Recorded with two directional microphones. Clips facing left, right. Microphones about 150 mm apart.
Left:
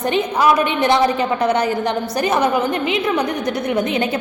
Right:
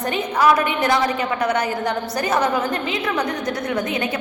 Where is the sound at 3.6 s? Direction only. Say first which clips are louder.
Left 5 dB; 20° left (ahead or behind).